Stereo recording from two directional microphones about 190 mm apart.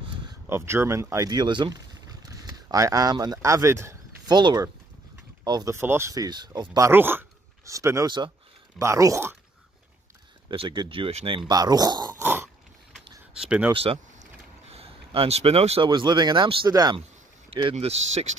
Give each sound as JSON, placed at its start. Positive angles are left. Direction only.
{"t": 0.3, "sound": "speech", "side_deg": -15}
{"t": 10.5, "sound": "speech", "side_deg": -25}
{"t": 12.2, "sound": "cough", "side_deg": -10}
{"t": 13.4, "sound": "speech", "side_deg": -5}
{"t": 13.7, "sound": "speech", "side_deg": -30}